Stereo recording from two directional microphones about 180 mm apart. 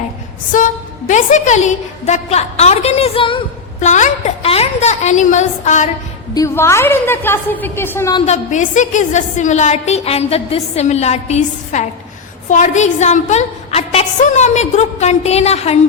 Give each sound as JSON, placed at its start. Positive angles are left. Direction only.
{"t": 0.5, "sound": "a woman's voice", "side_deg": 45}
{"t": 3.8, "sound": "a woman's voice", "side_deg": 40}
{"t": 6.3, "sound": "a woman's voice", "side_deg": 15}
{"t": 8.3, "sound": "a woman's voice", "side_deg": 45}